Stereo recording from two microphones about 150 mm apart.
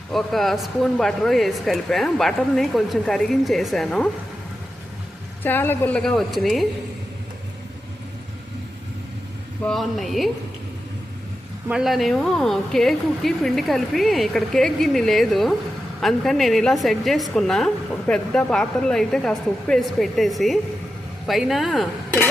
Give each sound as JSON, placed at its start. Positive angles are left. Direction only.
{"t": 0.1, "sound": "speech", "side_deg": 0}
{"t": 5.4, "sound": "a woman's voice", "side_deg": 15}
{"t": 9.6, "sound": "speech", "side_deg": 0}
{"t": 11.7, "sound": "speech", "side_deg": 0}